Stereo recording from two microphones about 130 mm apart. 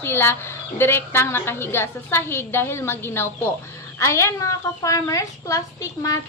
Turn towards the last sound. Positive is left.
turn(degrees=25)  # may be behind; listen again after turning